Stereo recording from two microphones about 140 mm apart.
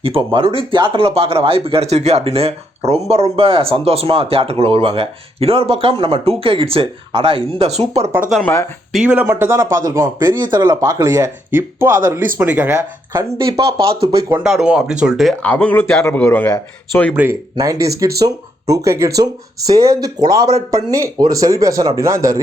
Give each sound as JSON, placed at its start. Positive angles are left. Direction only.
{"t": 0.0, "sound": "speech", "side_deg": -40}
{"t": 8.9, "sound": "speech", "side_deg": -5}
{"t": 9.2, "sound": "speech", "side_deg": -15}
{"t": 12.7, "sound": "speech", "side_deg": -30}
{"t": 14.4, "sound": "speech", "side_deg": -5}
{"t": 15.4, "sound": "a man's voice", "side_deg": 10}
{"t": 17.2, "sound": "speech", "side_deg": -15}